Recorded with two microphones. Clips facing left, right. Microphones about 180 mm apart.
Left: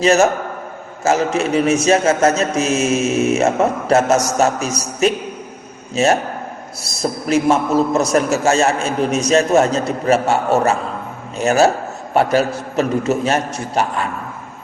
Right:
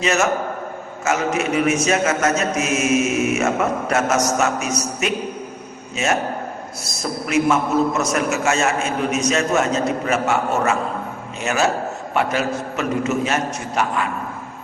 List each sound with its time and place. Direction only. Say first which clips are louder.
0.0 s a man's voice: left 6 dB; 35° left (ahead or behind)